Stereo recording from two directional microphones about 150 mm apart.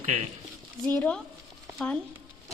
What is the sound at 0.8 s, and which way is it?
Speech, 10° left (ahead or behind).